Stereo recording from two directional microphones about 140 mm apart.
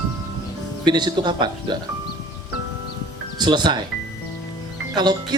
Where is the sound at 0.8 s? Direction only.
30° right (ahead or behind).